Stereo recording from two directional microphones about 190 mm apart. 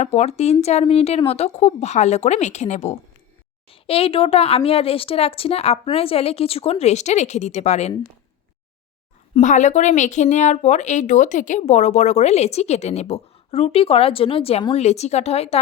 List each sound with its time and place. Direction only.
0.0 s speech: 35° left (ahead or behind)
9.3 s speech: 40° left (ahead or behind)